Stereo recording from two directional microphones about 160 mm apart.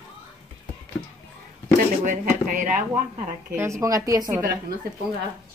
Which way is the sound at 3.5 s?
15° right (ahead or behind).